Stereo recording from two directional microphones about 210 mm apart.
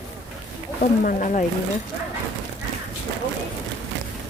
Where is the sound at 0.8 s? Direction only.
40° left (ahead or behind).